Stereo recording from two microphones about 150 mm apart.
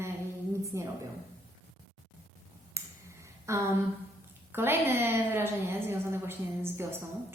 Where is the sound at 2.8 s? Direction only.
20° right (ahead or behind).